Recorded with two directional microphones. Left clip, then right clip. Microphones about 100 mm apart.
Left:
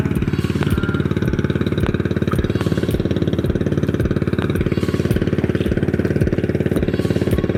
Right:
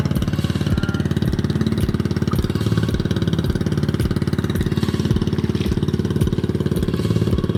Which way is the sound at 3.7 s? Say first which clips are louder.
Left 3 dB; 15° right (ahead or behind).